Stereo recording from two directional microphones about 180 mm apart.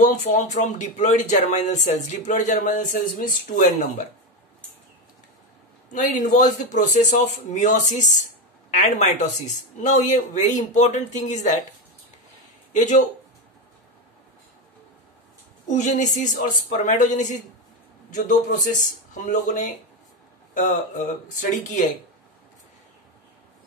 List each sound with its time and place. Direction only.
0.0 s speech: 45° left (ahead or behind)
5.9 s a man's voice: 45° left (ahead or behind)
12.7 s speech: 40° left (ahead or behind)
15.7 s speech: 40° left (ahead or behind)